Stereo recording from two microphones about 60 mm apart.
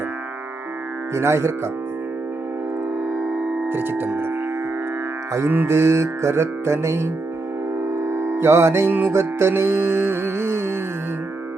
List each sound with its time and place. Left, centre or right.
1.1 s music: right
3.1 s music: centre
3.7 s music: right
5.5 s music: right
5.7 s music: right
8.9 s music: right
9.1 s music: right